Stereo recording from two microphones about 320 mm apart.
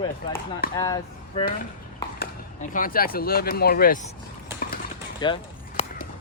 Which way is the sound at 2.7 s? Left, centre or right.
Left.